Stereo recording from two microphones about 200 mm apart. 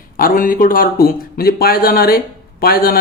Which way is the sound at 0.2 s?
45° left (ahead or behind).